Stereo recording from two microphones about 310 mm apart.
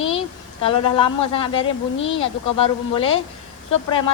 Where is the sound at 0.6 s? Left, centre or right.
Centre.